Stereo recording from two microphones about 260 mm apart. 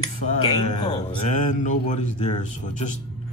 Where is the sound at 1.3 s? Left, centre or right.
Left.